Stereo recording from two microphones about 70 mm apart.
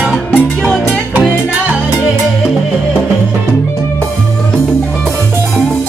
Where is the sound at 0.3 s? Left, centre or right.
Centre.